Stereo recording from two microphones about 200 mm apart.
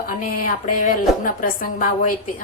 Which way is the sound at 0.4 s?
45° left (ahead or behind).